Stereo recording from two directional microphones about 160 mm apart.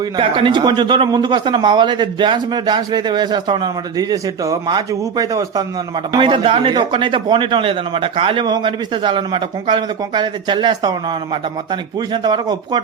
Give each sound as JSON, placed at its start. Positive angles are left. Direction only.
{"t": 0.2, "sound": "a man's voice", "side_deg": -30}